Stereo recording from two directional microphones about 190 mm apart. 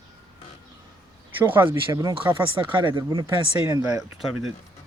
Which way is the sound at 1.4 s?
10° right (ahead or behind).